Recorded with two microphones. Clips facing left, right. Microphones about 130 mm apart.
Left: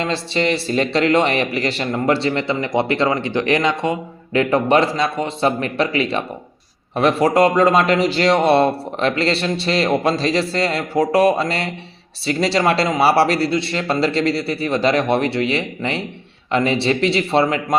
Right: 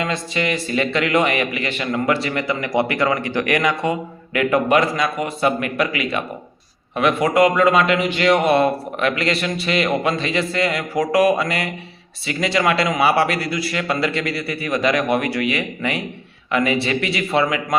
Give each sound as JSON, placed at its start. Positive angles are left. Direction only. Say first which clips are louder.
{"t": 0.0, "sound": "speech", "louder": "left 3 dB", "side_deg": 30}